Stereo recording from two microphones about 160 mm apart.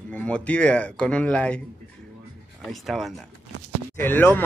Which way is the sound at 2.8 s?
Centre (ahead or behind).